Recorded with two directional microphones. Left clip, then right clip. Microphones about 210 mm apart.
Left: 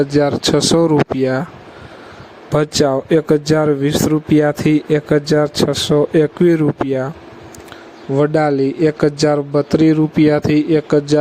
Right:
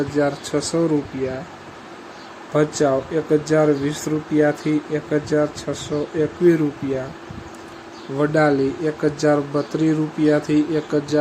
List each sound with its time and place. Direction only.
0.1 s speech: 40° left (ahead or behind)
2.5 s speech: 45° left (ahead or behind)
8.2 s speech: 40° left (ahead or behind)